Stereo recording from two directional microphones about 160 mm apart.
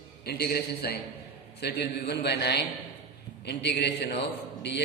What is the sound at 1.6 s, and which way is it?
A man's voice, 90° left.